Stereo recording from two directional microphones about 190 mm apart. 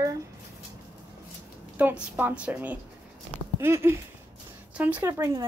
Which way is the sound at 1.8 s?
10° right (ahead or behind).